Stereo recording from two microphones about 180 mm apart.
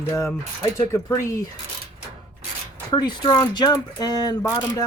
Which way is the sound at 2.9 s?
25° left (ahead or behind).